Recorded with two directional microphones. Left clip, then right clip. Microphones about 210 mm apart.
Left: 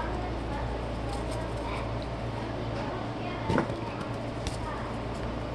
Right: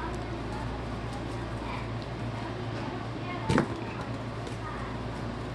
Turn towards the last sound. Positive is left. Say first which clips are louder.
# right 1 dB
turn(degrees=-35)  # may be behind; listen again after turning